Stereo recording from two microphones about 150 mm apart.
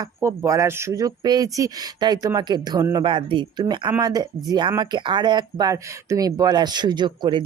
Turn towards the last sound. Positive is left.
turn(degrees=-30)  # may be behind; listen again after turning